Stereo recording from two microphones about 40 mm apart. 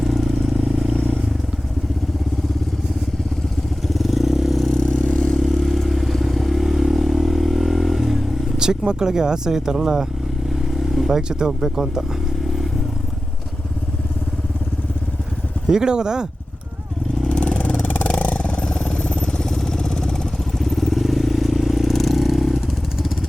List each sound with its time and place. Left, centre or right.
0.0 s vehicle: centre
0.9 s vehicle: left
3.9 s vehicle: centre
4.6 s vehicle: centre
4.9 s vehicle: left
5.4 s vehicle: centre
8.5 s speech: centre
10.5 s vehicle: centre
11.1 s speech: centre
15.7 s speech: centre
17.8 s vehicle: left
19.4 s vehicle: centre
20.6 s vehicle: centre